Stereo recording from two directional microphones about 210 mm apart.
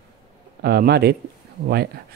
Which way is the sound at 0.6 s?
50° right (ahead or behind).